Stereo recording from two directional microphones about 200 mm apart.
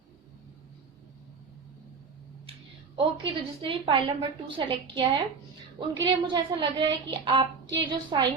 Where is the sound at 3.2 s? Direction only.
25° right (ahead or behind).